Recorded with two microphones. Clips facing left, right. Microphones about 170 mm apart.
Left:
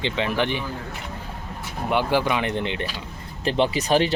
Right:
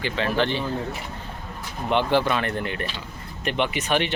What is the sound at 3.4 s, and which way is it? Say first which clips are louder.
Speech: left 3 dB; 30° left (ahead or behind).